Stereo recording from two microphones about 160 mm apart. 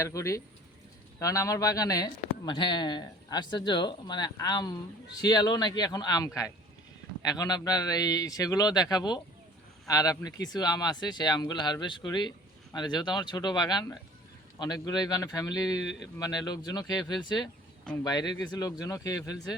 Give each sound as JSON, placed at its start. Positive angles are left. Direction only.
{"t": 0.0, "sound": "speech", "side_deg": 20}